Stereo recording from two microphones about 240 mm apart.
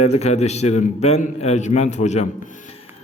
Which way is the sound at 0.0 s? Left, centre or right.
Left.